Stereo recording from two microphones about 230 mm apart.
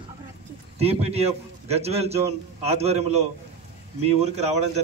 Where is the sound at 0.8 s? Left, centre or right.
Right.